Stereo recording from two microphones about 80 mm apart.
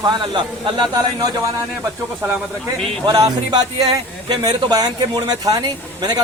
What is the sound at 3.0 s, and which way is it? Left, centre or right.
A man's voice, right.